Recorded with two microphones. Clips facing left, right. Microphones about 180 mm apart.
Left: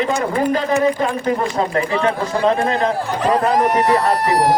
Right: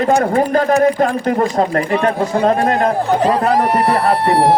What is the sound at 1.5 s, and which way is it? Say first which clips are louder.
Speech: right 3 dB; 45° right (ahead or behind).